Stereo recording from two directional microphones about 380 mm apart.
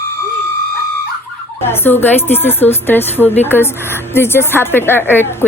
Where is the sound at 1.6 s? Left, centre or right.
Centre.